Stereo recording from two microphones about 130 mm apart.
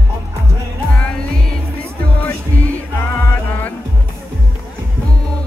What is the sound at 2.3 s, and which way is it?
Music, 20° left (ahead or behind).